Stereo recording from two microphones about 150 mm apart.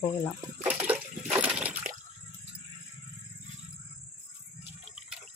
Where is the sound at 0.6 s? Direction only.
5° right (ahead or behind).